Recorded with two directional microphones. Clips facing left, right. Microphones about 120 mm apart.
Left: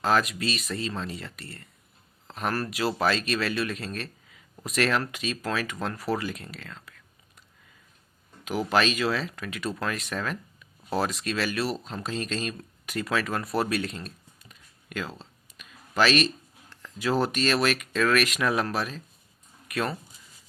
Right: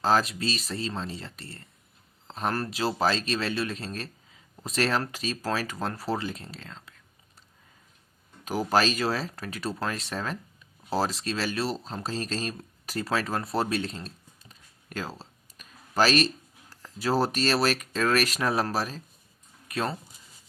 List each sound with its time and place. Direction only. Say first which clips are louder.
0.0 s speech: even; 30° right (ahead or behind)
8.4 s speech: even; 35° right (ahead or behind)